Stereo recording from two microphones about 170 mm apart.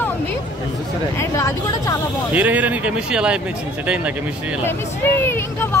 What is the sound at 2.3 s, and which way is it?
Speech, 10° right (ahead or behind).